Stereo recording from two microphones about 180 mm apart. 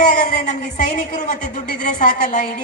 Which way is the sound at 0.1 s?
45° left (ahead or behind).